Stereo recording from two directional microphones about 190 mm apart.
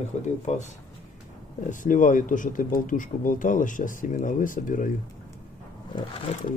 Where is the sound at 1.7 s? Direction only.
40° left (ahead or behind).